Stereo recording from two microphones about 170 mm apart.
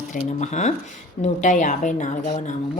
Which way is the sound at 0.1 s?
45° left (ahead or behind).